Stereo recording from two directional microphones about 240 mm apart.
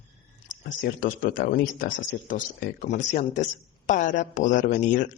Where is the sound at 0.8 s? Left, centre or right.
Left.